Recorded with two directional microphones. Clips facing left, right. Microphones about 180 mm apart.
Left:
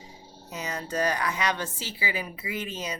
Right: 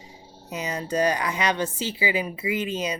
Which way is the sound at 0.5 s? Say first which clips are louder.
Right 5 dB; 15° right (ahead or behind).